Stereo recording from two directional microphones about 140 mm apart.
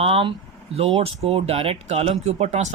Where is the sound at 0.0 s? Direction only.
40° right (ahead or behind).